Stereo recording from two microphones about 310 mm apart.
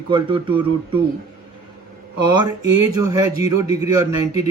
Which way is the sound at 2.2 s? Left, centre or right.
Centre.